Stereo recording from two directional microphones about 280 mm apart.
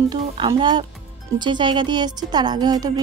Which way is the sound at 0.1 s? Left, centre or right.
Centre.